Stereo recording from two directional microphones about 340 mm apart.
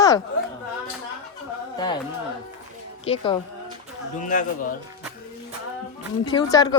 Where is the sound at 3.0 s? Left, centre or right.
Centre.